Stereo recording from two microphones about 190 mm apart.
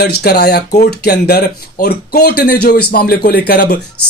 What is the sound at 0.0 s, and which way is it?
Speech, 60° left (ahead or behind).